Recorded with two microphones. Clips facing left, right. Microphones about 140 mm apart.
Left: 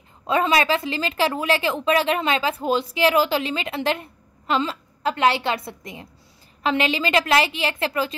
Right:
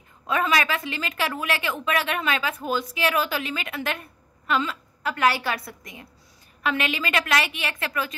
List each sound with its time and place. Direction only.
0.3 s a woman's voice: 25° left (ahead or behind)